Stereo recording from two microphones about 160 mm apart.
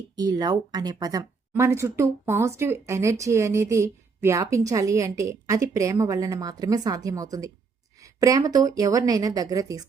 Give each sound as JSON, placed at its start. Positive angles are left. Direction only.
{"t": 0.2, "sound": "speech", "side_deg": -25}